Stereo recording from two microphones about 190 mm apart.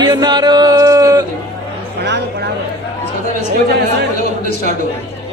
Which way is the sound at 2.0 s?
60° right (ahead or behind).